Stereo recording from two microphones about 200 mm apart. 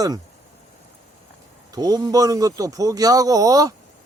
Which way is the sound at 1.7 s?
20° right (ahead or behind).